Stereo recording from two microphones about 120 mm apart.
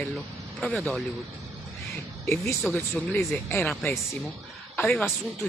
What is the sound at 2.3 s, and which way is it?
Speech, 20° left (ahead or behind).